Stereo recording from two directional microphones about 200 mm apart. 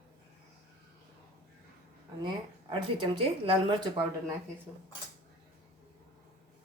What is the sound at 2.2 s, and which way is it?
Speech, 25° right (ahead or behind).